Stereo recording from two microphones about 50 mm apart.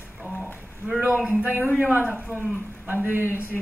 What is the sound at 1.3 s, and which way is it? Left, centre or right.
A man's voice, right.